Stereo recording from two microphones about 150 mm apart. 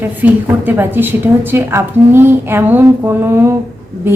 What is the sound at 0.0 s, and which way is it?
A woman's voice, 15° right (ahead or behind).